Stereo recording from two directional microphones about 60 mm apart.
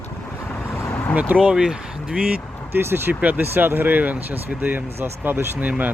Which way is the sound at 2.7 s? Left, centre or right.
Right.